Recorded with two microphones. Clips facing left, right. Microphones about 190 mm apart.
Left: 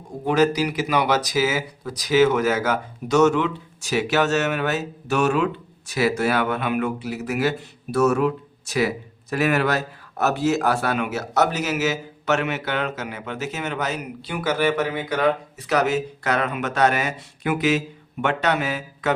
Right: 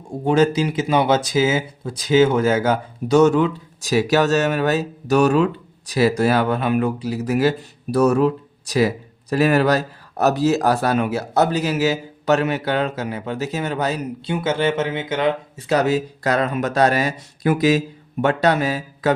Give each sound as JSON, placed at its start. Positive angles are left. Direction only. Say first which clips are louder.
{"t": 0.3, "sound": "speech", "louder": "right 3 dB", "side_deg": -30}